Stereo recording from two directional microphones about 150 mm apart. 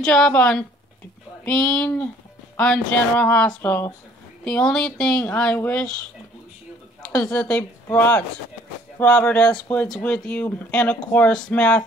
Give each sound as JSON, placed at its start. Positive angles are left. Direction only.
{"t": 0.0, "sound": "a woman's voice", "side_deg": 5}
{"t": 7.0, "sound": "a woman's voice", "side_deg": 5}